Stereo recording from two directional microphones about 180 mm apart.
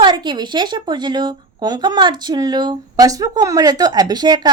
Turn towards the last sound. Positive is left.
turn(degrees=-20)  # may be behind; listen again after turning